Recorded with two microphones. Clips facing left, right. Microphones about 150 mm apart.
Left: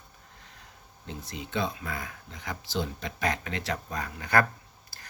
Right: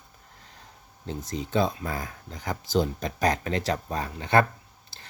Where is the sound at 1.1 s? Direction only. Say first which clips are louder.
Right 7 dB; 35° right (ahead or behind).